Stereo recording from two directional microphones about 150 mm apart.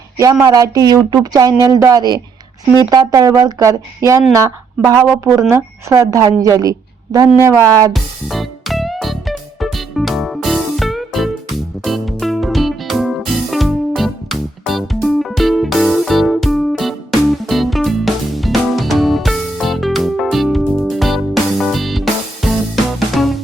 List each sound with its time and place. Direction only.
0.4 s speech: 25° right (ahead or behind)
7.9 s music: centre (ahead or behind)